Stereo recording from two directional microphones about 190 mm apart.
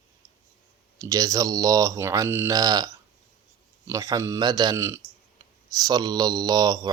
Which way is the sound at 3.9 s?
15° right (ahead or behind).